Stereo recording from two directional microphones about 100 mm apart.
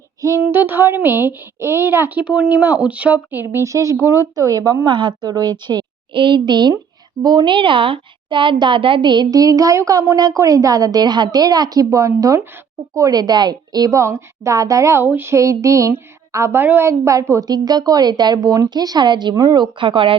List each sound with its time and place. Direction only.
0.4 s speech: 20° right (ahead or behind)
3.4 s a woman's voice: 30° right (ahead or behind)
4.9 s a woman's voice: 50° right (ahead or behind); by 16.9 s 20° right (ahead or behind)
16.9 s a woman's voice: 30° right (ahead or behind)
19.8 s speech: 60° right (ahead or behind)